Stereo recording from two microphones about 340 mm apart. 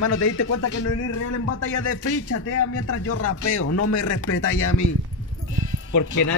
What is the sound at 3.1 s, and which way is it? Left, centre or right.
Speech, left.